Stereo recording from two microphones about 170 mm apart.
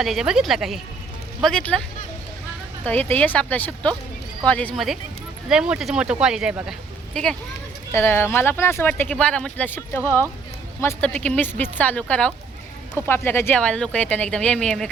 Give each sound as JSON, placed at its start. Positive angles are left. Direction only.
{"t": 0.0, "sound": "speech", "side_deg": 0}
{"t": 2.8, "sound": "speech", "side_deg": 10}
{"t": 7.9, "sound": "speech", "side_deg": 15}